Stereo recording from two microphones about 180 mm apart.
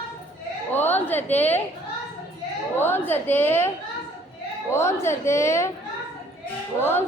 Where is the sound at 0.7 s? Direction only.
10° left (ahead or behind).